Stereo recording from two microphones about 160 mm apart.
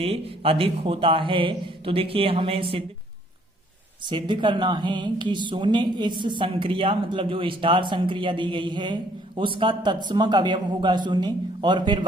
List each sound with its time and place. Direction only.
0.0 s speech: 35° right (ahead or behind)
4.1 s a woman's voice: 30° right (ahead or behind)